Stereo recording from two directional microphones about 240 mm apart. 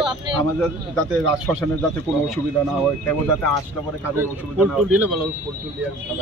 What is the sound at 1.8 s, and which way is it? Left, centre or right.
Speech, centre.